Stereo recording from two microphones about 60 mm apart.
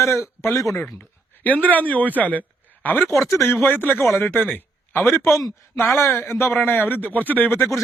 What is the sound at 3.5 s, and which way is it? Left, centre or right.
Speech, left.